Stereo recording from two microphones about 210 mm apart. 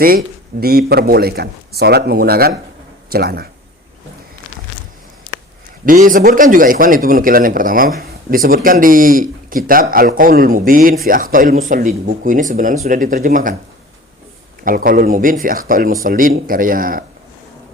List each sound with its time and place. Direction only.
0.0 s speech: 45° right (ahead or behind)
5.8 s speech: 40° right (ahead or behind)
14.6 s speech: 45° right (ahead or behind)